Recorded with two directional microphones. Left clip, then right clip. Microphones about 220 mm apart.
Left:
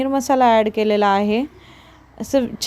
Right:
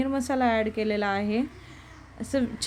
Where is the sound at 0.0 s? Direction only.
30° left (ahead or behind).